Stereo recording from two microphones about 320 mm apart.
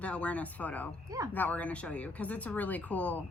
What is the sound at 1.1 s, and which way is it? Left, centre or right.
Speech, centre.